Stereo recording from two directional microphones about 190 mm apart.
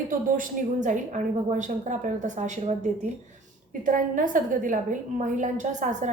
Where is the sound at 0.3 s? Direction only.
45° right (ahead or behind).